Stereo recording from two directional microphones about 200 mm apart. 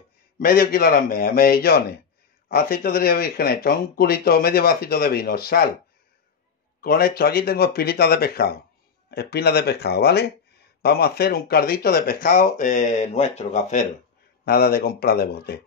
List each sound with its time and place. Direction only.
0.4 s speech: 50° left (ahead or behind)
6.8 s speech: 50° left (ahead or behind)
14.4 s speech: 50° left (ahead or behind)